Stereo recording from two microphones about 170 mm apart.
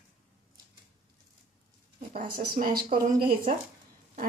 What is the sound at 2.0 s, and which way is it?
A woman's voice, 55° right (ahead or behind).